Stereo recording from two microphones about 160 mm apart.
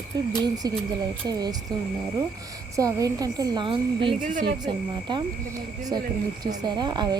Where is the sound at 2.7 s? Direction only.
20° right (ahead or behind).